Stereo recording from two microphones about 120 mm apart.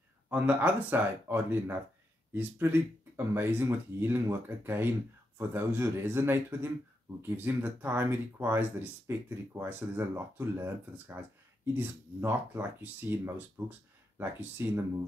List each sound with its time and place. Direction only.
0.3 s speech: 15° right (ahead or behind)
3.3 s speech: 20° right (ahead or behind)